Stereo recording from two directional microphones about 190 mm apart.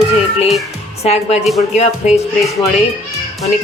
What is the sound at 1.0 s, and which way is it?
Speech, 35° left (ahead or behind).